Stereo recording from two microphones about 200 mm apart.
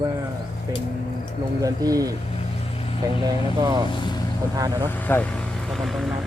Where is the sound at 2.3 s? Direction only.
30° left (ahead or behind).